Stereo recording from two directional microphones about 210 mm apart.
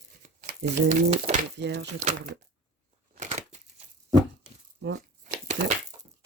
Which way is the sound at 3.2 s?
35° right (ahead or behind).